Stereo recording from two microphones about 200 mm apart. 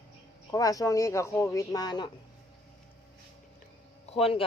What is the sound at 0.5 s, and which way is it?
A woman's voice, 15° left (ahead or behind).